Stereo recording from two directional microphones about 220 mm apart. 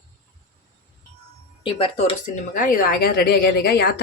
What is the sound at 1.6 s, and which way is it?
A woman's voice, 25° left (ahead or behind).